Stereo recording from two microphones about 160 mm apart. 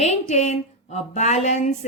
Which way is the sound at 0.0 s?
45° left (ahead or behind).